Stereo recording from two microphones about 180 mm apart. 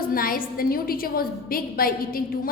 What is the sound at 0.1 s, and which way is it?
A woman's voice, 50° left (ahead or behind).